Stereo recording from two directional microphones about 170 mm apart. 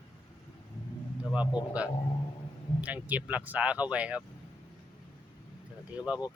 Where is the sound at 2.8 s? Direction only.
10° right (ahead or behind).